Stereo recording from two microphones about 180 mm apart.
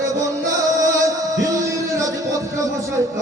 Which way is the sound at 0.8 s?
20° right (ahead or behind).